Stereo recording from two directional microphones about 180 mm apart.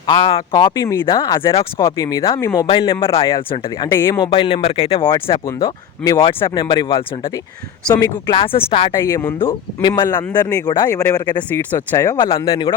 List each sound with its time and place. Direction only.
0.0 s speech: 30° left (ahead or behind)
2.6 s speech: 30° left (ahead or behind)
4.2 s speech: 30° left (ahead or behind)
6.0 s speech: 5° left (ahead or behind)
6.5 s speech: 25° left (ahead or behind)
9.0 s speech: 15° left (ahead or behind)
11.4 s speech: 10° left (ahead or behind)